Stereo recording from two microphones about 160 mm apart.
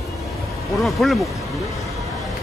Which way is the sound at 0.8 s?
Centre (ahead or behind).